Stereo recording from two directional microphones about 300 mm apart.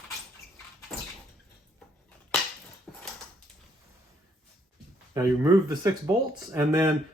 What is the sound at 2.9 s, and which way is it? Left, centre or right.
Dog, centre.